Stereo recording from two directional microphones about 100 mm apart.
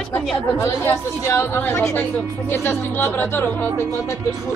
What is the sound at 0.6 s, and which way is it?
A woman's voice, 30° left (ahead or behind).